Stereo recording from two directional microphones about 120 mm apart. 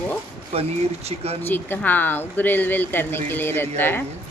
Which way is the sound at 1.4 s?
15° left (ahead or behind).